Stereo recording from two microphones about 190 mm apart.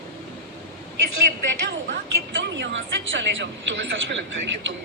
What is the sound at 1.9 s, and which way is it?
A woman's voice, 75° right (ahead or behind).